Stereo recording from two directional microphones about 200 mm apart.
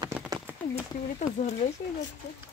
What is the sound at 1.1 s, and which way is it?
Speech, 35° left (ahead or behind).